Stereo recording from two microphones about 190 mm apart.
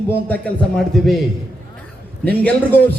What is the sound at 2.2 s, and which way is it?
Speech, 10° left (ahead or behind).